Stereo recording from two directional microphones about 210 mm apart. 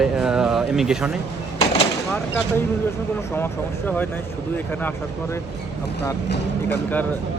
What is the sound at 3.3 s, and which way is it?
Speech, 10° left (ahead or behind).